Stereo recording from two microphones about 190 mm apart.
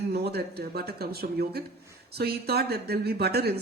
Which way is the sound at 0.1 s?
55° right (ahead or behind).